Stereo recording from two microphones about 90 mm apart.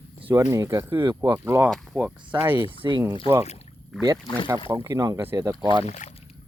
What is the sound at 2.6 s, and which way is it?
Speech, 65° right (ahead or behind).